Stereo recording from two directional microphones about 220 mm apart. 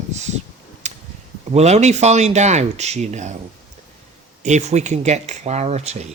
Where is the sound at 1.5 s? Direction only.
30° right (ahead or behind).